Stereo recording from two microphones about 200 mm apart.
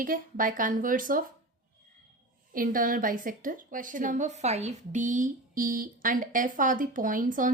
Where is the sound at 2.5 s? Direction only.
45° right (ahead or behind).